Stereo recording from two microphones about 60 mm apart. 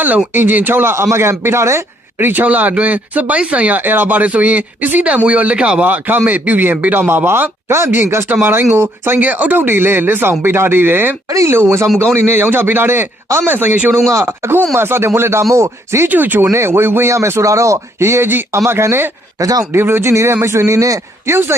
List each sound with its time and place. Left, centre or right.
0.3 s speech: right
2.1 s speech: right
5.8 s speech: right
11.3 s speech: right
11.5 s speech: right
16.0 s speech: right
16.5 s speech: right
18.6 s speech: right
19.4 s speech: right
19.7 s speech: right
21.2 s speech: right